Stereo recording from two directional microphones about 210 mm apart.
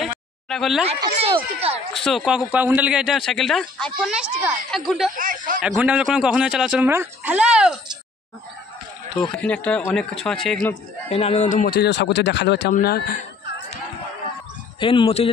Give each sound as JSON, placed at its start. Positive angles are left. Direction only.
{"t": 0.5, "sound": "speech", "side_deg": 0}
{"t": 0.8, "sound": "speech", "side_deg": -25}
{"t": 2.0, "sound": "speech", "side_deg": 0}
{"t": 5.1, "sound": "speech", "side_deg": -40}
{"t": 5.6, "sound": "speech", "side_deg": -5}
{"t": 9.2, "sound": "speech", "side_deg": 5}
{"t": 11.1, "sound": "speech", "side_deg": 30}
{"t": 14.8, "sound": "speech", "side_deg": 25}